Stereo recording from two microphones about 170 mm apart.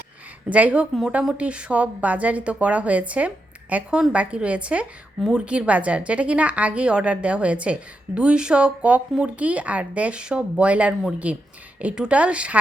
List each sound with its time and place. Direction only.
0.5 s a woman's voice: 10° right (ahead or behind)